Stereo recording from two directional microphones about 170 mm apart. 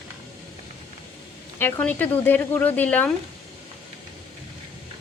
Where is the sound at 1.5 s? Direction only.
10° left (ahead or behind).